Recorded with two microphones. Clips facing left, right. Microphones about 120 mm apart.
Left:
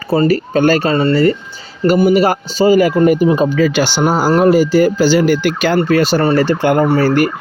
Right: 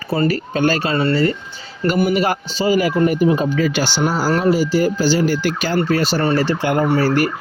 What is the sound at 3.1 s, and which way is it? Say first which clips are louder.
Speech: left 5 dB; 90° left.